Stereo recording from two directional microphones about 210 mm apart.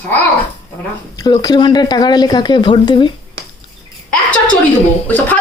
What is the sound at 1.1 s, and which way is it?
Speech, 20° left (ahead or behind).